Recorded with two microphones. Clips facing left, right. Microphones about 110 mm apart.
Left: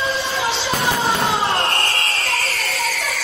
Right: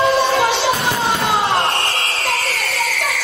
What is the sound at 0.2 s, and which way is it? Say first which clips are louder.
Music: right 7 dB; 65° right (ahead or behind).